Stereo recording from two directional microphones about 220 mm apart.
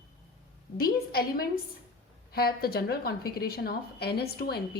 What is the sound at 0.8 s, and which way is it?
A woman's voice, 45° left (ahead or behind).